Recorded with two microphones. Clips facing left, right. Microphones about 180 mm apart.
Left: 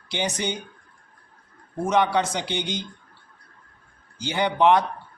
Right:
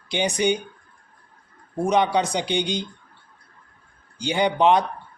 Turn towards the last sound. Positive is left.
turn(degrees=-15)  # may be behind; listen again after turning